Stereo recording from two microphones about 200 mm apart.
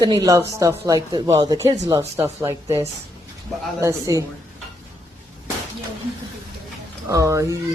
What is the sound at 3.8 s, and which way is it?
Speech, 15° right (ahead or behind).